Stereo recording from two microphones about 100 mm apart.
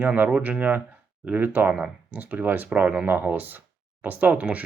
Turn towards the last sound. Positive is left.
turn(degrees=-15)  # may be behind; listen again after turning